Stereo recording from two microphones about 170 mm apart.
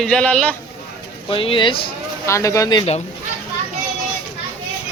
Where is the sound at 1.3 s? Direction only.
30° left (ahead or behind).